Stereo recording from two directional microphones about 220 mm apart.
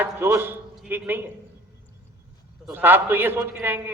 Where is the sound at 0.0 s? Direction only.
10° right (ahead or behind).